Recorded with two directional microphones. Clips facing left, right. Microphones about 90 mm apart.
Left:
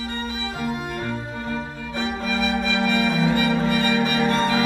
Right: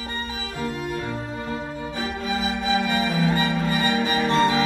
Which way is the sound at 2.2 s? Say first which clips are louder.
Left 1 dB; 30° right (ahead or behind).